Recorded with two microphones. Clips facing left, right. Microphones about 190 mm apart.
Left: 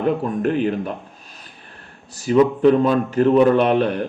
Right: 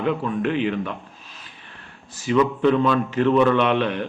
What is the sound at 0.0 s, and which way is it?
A man's voice, 40° left (ahead or behind).